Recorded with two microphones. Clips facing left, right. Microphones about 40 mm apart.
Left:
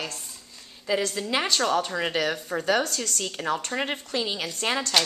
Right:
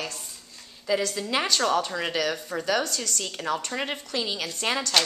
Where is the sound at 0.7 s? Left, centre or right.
Centre.